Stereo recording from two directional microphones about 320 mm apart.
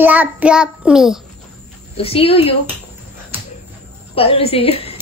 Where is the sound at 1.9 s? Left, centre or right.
Centre.